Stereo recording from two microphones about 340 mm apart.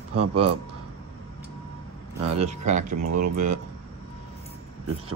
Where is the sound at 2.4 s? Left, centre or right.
Right.